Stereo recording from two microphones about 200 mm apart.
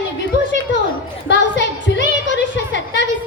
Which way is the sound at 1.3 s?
60° left (ahead or behind).